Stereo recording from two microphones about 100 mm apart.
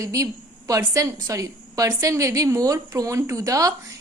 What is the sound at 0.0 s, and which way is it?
A woman's voice, 30° right (ahead or behind).